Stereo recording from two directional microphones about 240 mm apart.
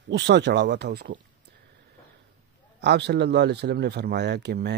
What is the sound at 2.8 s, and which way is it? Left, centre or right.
Speech, right.